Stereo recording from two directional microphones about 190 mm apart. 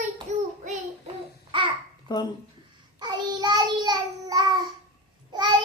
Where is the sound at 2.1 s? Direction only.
25° left (ahead or behind).